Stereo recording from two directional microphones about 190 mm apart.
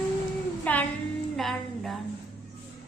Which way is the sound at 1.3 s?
Centre (ahead or behind).